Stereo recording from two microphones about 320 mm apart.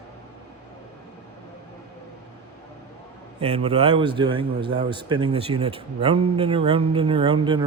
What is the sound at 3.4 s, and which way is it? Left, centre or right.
A man's voice, centre.